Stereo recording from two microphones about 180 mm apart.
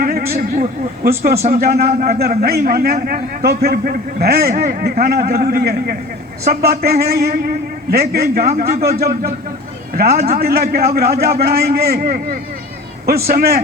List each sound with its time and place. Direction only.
0.0 s a man's voice: 60° right (ahead or behind)